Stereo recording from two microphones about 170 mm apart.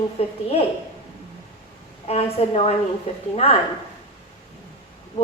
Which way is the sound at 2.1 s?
35° left (ahead or behind).